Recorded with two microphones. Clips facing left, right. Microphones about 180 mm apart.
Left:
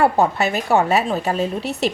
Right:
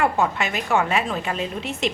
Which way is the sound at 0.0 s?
35° left (ahead or behind).